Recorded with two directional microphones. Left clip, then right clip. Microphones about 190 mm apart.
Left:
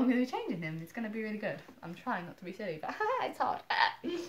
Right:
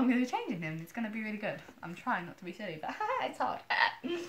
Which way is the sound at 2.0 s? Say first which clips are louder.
Right 2 dB; 20° left (ahead or behind).